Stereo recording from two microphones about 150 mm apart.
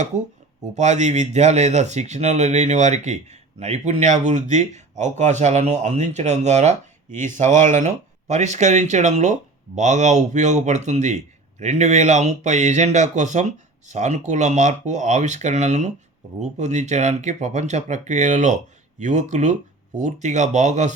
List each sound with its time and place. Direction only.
0.7 s speech: 50° right (ahead or behind)